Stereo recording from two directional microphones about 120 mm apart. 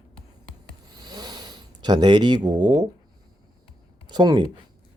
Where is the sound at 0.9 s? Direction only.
35° right (ahead or behind).